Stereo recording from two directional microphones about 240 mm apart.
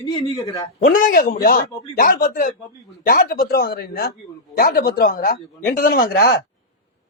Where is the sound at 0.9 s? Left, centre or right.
Left.